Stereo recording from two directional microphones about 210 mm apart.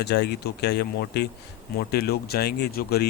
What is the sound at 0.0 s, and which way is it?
A man's voice, 50° left (ahead or behind).